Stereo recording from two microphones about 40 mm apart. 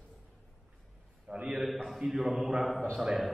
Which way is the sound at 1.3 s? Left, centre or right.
Right.